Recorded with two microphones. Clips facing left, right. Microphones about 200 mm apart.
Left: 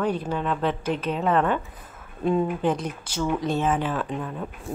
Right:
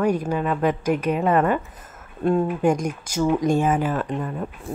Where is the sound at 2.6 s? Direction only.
10° right (ahead or behind).